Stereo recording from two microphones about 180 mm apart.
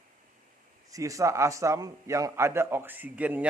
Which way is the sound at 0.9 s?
20° right (ahead or behind).